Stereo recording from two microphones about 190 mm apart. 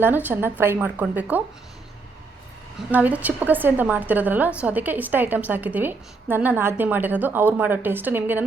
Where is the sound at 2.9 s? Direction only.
10° right (ahead or behind).